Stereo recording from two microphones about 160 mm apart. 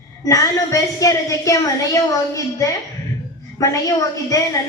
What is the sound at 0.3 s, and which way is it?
A woman's voice, 20° left (ahead or behind).